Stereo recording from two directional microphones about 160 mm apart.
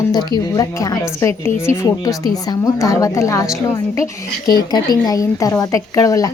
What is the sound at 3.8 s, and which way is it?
A woman's voice, 20° left (ahead or behind).